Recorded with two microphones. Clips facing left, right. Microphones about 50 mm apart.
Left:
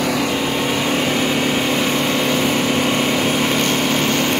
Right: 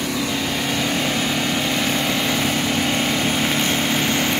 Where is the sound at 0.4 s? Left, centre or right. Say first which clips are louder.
Left 3 dB; centre.